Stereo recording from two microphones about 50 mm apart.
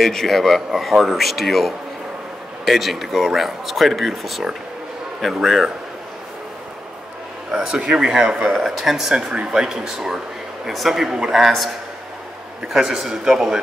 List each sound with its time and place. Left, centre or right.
0.0 s speech: centre
7.5 s speech: centre
12.6 s speech: centre